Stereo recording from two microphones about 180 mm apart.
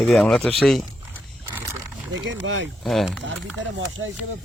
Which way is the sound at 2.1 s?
90° right.